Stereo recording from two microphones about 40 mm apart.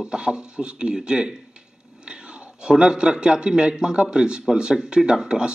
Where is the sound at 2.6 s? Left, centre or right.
Right.